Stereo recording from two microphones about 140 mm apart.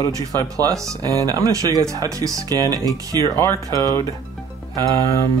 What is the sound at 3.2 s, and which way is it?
Speech, 20° left (ahead or behind).